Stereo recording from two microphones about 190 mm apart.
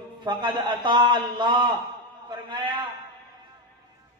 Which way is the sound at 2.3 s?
25° right (ahead or behind).